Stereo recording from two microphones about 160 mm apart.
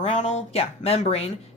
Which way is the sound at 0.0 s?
45° left (ahead or behind).